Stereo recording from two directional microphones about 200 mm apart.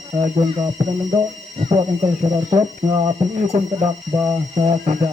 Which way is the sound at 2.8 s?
20° right (ahead or behind).